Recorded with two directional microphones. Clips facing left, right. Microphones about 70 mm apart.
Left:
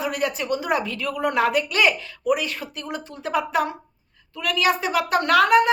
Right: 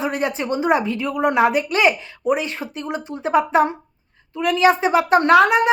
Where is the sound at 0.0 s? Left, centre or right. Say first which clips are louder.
Right 3 dB; right.